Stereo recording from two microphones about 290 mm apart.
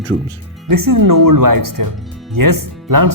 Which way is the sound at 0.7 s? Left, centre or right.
Right.